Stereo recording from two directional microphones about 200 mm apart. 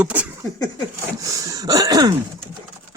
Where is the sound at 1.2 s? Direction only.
15° right (ahead or behind).